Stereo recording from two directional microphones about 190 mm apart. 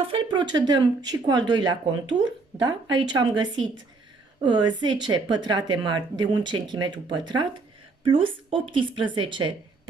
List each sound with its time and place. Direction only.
0.1 s speech: 25° right (ahead or behind)